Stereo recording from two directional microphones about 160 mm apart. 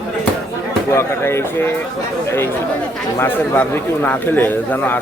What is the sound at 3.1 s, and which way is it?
Speech, 15° left (ahead or behind).